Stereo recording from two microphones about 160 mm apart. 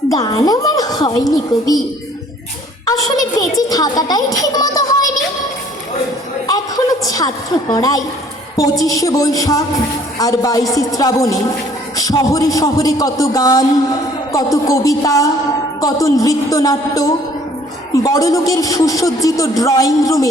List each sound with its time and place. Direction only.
0.1 s a man's voice: 25° left (ahead or behind)
2.8 s a child's voice: 25° left (ahead or behind)
6.5 s a sound: 20° left (ahead or behind)
8.5 s a man's voice: 20° left (ahead or behind)